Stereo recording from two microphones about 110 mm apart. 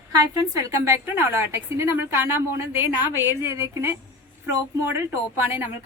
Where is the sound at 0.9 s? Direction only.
25° right (ahead or behind).